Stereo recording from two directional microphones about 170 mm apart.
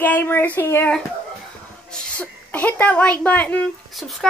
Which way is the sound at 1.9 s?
5° left (ahead or behind).